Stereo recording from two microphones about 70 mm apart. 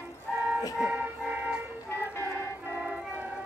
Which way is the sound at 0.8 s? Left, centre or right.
Centre.